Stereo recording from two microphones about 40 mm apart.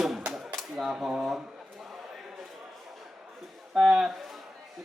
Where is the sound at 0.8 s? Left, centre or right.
Centre.